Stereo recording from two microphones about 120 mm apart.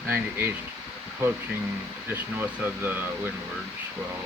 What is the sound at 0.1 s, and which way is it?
Speech, 15° right (ahead or behind).